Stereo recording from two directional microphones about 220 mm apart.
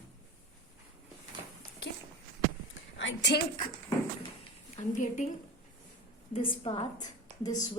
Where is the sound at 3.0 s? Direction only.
55° left (ahead or behind).